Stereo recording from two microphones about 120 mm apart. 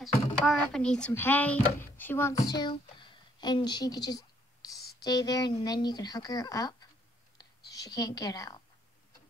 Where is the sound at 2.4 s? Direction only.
35° left (ahead or behind).